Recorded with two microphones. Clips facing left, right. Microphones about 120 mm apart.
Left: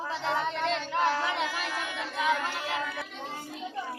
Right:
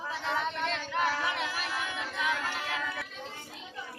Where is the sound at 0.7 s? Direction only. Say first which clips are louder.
Left 3 dB; 30° left (ahead or behind).